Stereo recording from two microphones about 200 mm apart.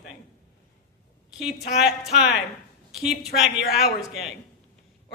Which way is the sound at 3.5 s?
50° left (ahead or behind).